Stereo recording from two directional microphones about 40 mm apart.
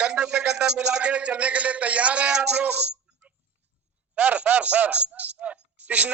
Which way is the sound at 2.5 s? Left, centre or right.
Right.